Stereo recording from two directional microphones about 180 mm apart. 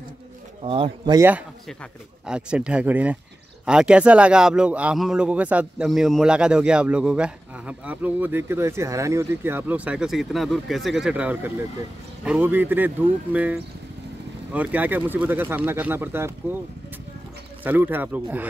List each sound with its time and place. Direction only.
0.7 s speech: 30° right (ahead or behind)
1.7 s a man's voice: centre (ahead or behind)
17.6 s speech: 10° right (ahead or behind)